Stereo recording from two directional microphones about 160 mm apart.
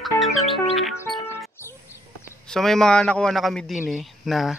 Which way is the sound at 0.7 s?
Centre (ahead or behind).